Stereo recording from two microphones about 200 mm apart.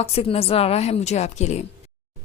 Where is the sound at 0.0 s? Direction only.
30° left (ahead or behind).